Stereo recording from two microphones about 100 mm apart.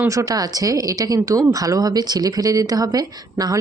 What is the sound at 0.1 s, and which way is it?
Speech, 35° right (ahead or behind).